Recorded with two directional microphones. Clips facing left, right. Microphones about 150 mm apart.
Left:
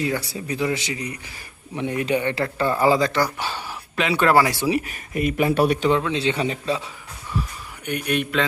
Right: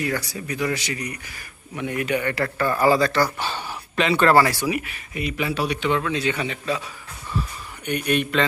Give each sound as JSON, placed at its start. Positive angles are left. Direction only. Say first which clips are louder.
{"t": 0.0, "sound": "speech", "louder": "left 1 dB", "side_deg": 25}
{"t": 4.5, "sound": "speech", "louder": "left 3 dB", "side_deg": 25}
{"t": 4.9, "sound": "speech", "louder": "left 5 dB", "side_deg": 45}
{"t": 6.0, "sound": "speech", "louder": "left 2 dB", "side_deg": 25}
{"t": 7.9, "sound": "a man's voice", "louder": "right 1 dB", "side_deg": 5}